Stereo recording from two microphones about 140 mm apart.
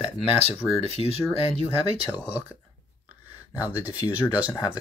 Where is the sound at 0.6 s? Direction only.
Centre (ahead or behind).